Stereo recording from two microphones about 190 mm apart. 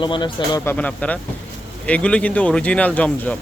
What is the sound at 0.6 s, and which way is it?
Speech, 10° left (ahead or behind).